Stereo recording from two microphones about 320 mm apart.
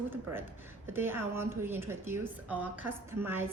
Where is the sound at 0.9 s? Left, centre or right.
Centre.